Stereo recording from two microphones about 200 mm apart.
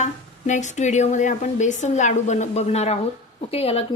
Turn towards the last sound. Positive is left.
turn(degrees=30)  # may be behind; listen again after turning